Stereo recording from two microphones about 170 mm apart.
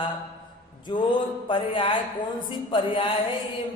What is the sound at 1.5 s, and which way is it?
A woman's voice, 30° left (ahead or behind).